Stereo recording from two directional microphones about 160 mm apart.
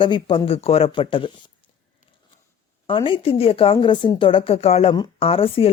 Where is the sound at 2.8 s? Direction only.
30° left (ahead or behind).